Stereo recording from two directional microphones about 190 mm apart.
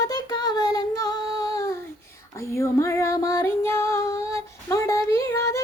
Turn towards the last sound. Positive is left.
turn(degrees=15)  # may be behind; listen again after turning